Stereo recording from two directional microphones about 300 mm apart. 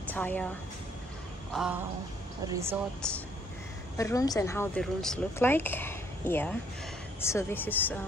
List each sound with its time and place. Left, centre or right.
0.1 s speech: centre
1.5 s a sound: centre
2.4 s speech: centre
4.0 s speech: centre